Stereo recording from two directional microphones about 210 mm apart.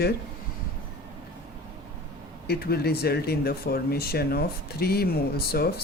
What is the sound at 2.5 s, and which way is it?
Speech, 50° left (ahead or behind).